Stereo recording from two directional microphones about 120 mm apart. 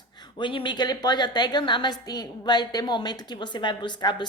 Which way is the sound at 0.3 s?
40° left (ahead or behind).